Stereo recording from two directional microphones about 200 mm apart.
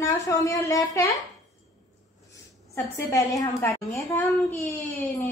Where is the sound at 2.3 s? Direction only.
15° left (ahead or behind).